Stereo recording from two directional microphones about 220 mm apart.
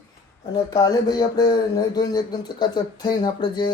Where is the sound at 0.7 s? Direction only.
15° left (ahead or behind).